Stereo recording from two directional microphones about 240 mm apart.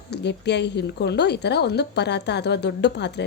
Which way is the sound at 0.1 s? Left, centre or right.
Left.